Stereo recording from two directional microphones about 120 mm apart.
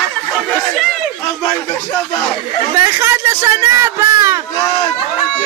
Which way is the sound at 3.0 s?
25° right (ahead or behind).